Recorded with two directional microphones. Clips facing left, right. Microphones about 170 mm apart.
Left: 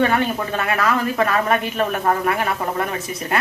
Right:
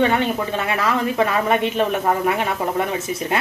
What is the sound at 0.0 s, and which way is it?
A woman's voice, 20° right (ahead or behind).